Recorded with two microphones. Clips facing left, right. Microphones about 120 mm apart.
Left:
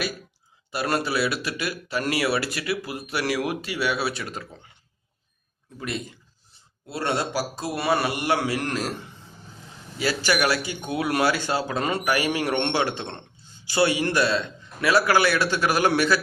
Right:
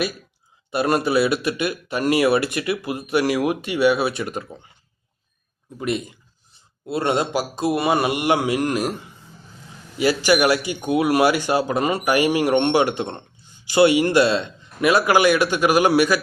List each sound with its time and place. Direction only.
0.7 s speech: 20° right (ahead or behind)
5.8 s speech: 20° right (ahead or behind)
10.0 s speech: 15° right (ahead or behind)